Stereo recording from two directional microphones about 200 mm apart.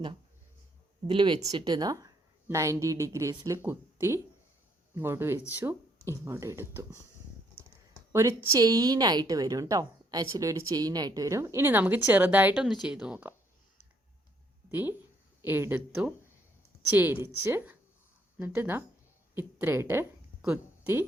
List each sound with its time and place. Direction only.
1.0 s a woman's voice: 25° right (ahead or behind)
8.1 s a woman's voice: 15° right (ahead or behind)
14.7 s a woman's voice: 10° right (ahead or behind)